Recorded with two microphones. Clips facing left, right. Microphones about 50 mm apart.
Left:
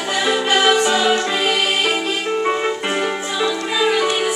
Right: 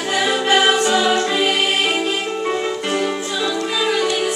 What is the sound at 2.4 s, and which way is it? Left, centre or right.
Music, left.